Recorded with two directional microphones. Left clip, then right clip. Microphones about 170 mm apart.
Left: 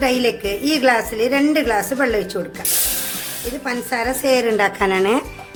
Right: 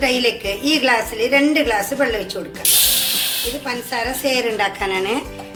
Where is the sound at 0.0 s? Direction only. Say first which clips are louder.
Even; 65° left (ahead or behind).